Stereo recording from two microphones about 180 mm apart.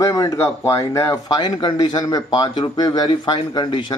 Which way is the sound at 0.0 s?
20° left (ahead or behind).